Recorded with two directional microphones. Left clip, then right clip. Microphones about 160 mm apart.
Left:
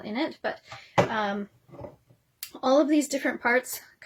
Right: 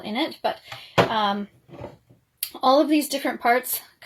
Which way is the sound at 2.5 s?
40° left (ahead or behind).